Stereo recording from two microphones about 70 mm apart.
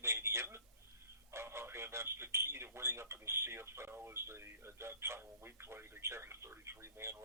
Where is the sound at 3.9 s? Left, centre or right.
Right.